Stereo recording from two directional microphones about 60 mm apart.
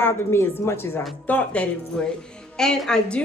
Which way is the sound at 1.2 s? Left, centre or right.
Left.